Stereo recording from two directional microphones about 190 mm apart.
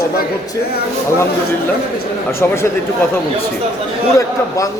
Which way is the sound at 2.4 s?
15° left (ahead or behind).